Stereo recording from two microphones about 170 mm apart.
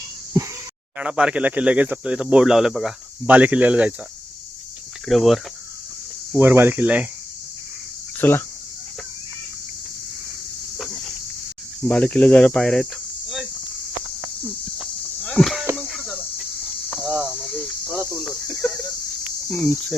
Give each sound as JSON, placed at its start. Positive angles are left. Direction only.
{"t": 0.4, "sound": "a sound", "side_deg": -15}
{"t": 0.9, "sound": "speech", "side_deg": -5}
{"t": 5.0, "sound": "speech", "side_deg": 0}
{"t": 6.3, "sound": "speech", "side_deg": -10}
{"t": 8.2, "sound": "speech", "side_deg": 15}
{"t": 11.8, "sound": "speech", "side_deg": 5}
{"t": 15.2, "sound": "a sound", "side_deg": 5}
{"t": 15.7, "sound": "cricket", "side_deg": 5}
{"t": 18.4, "sound": "a sound", "side_deg": 15}
{"t": 19.5, "sound": "speech", "side_deg": 15}